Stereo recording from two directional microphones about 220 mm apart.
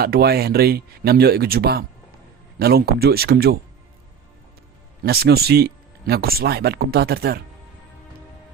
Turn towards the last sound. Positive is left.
turn(degrees=-45)  # may be behind; listen again after turning